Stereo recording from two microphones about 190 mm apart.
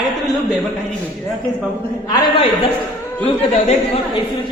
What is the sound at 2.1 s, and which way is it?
Speech, 30° left (ahead or behind).